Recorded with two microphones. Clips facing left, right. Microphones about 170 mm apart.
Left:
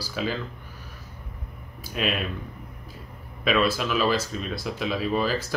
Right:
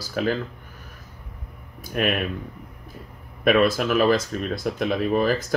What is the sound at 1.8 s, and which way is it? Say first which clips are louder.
Speech: right 4 dB; 55° right (ahead or behind).